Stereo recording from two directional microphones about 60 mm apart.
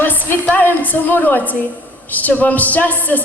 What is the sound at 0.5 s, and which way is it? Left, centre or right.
A woman's voice, left.